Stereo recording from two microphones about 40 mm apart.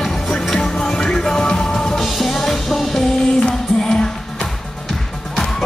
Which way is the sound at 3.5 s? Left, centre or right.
Centre.